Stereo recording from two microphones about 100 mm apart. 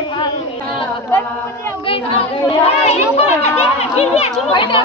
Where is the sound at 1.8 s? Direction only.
70° left (ahead or behind); by 4.5 s 90° left.